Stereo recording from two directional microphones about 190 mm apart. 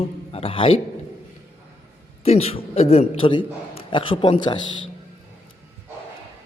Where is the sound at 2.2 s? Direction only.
30° left (ahead or behind).